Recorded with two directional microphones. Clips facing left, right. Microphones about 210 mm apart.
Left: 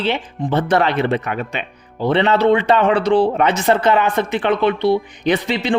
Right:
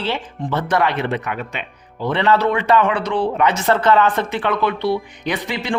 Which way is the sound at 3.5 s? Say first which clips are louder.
Left 1 dB; 15° left (ahead or behind).